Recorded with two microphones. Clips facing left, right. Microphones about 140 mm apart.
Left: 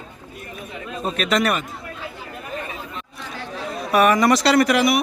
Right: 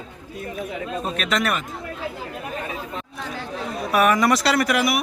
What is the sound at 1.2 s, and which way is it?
Speech, centre (ahead or behind).